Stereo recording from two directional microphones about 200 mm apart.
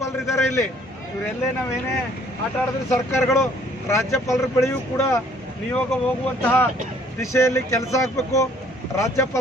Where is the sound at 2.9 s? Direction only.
15° left (ahead or behind).